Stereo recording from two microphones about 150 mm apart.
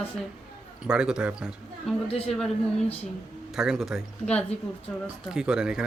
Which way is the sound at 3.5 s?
5° right (ahead or behind).